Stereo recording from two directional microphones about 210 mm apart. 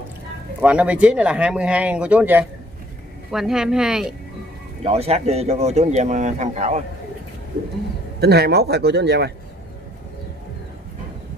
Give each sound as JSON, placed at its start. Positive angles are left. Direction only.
{"t": 0.6, "sound": "speech", "side_deg": -5}
{"t": 4.8, "sound": "speech", "side_deg": -30}
{"t": 8.2, "sound": "speech", "side_deg": -50}